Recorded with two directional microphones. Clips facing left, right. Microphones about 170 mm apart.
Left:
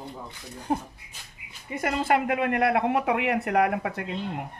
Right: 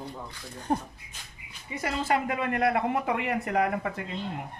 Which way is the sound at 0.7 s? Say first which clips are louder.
Left 1 dB; 5° left (ahead or behind).